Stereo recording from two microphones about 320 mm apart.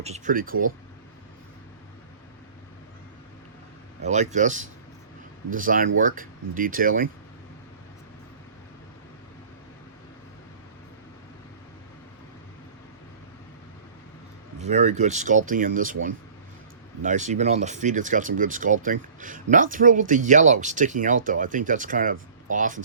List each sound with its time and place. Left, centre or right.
0.0 s speech: right
4.0 s speech: right
14.6 s speech: right
17.0 s speech: right